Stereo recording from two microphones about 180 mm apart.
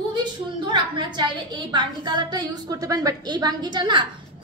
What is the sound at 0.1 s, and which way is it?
A woman's voice, 25° right (ahead or behind).